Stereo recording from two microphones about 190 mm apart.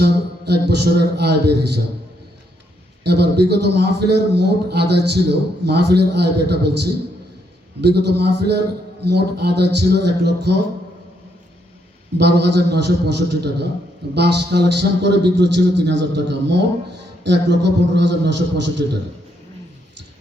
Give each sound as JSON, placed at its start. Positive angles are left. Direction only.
{"t": 0.0, "sound": "a man's voice", "side_deg": -60}
{"t": 3.0, "sound": "a man's voice", "side_deg": -60}
{"t": 7.8, "sound": "a man's voice", "side_deg": -60}
{"t": 12.1, "sound": "a man's voice", "side_deg": -60}